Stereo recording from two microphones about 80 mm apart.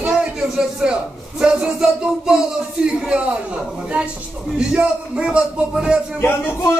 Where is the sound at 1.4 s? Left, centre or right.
Centre.